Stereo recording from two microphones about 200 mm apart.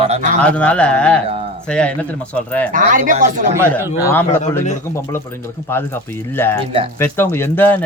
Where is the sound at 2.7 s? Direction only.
40° right (ahead or behind).